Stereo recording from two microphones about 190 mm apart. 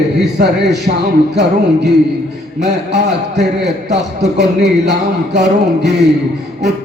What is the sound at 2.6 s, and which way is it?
A man's voice, 60° right (ahead or behind).